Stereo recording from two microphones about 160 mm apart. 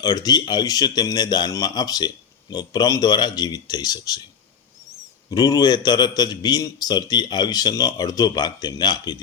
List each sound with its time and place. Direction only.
0.0 s speech: 25° left (ahead or behind)
5.3 s speech: 25° left (ahead or behind)